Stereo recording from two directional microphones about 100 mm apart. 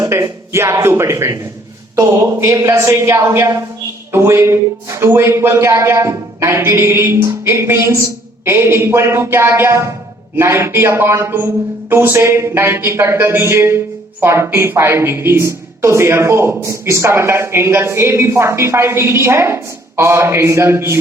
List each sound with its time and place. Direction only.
0.0 s a woman's voice: 30° right (ahead or behind)